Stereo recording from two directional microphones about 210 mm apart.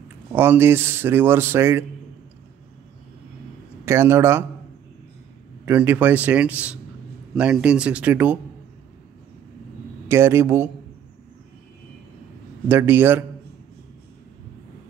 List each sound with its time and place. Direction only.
0.3 s speech: 10° right (ahead or behind)
3.8 s speech: 10° right (ahead or behind)
5.7 s speech: 10° right (ahead or behind)
10.0 s speech: 10° right (ahead or behind)
12.6 s speech: 10° right (ahead or behind)